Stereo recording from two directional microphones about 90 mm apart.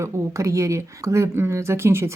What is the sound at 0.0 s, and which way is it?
Speech, 35° right (ahead or behind).